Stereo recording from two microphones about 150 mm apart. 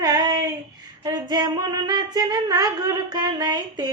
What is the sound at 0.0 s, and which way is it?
Child singing, 25° right (ahead or behind).